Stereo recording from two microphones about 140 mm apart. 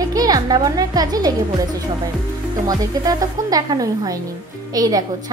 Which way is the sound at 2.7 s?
25° right (ahead or behind).